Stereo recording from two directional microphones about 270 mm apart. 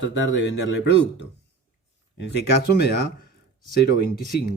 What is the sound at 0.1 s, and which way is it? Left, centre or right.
Speech, left.